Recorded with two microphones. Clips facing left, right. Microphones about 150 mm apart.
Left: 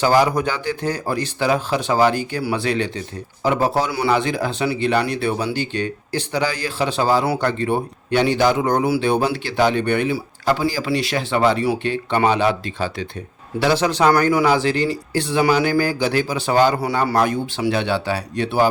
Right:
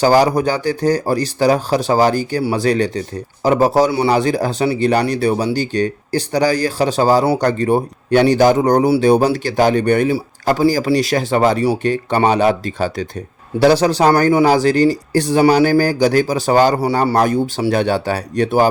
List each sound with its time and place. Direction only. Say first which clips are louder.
0.0 s speech: right 4 dB; 40° right (ahead or behind)